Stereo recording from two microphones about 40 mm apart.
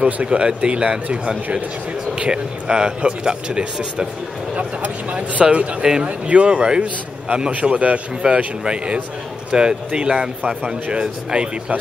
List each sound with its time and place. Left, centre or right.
0.0 s speech: right
4.6 s speech: right
7.7 s speech: right
8.2 s speech: centre
8.6 s speech: right